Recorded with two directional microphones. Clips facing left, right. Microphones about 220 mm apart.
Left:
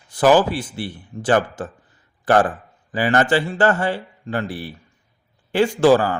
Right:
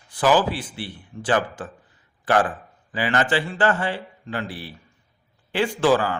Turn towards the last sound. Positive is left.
turn(degrees=40)  # may be behind; listen again after turning